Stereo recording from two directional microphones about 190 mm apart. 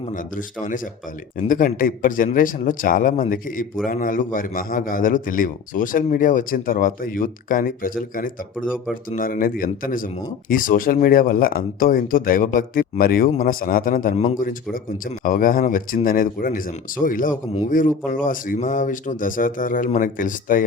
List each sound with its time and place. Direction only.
0.1 s a man's voice: 45° left (ahead or behind)